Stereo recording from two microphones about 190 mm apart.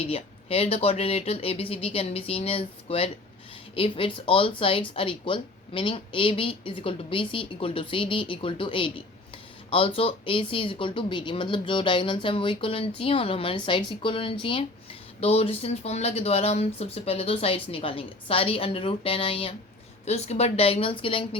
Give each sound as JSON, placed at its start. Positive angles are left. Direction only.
{"t": 0.0, "sound": "speech", "side_deg": 30}